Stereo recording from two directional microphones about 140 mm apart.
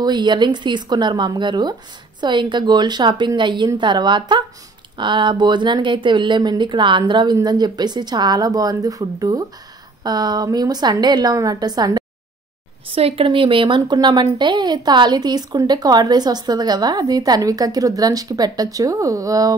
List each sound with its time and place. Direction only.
0.0 s a woman's voice: 30° right (ahead or behind)
12.9 s a woman's voice: 40° right (ahead or behind); by 19.5 s 25° right (ahead or behind)